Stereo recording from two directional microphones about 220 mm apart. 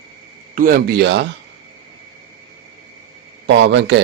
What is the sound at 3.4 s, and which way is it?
Speech, 55° right (ahead or behind).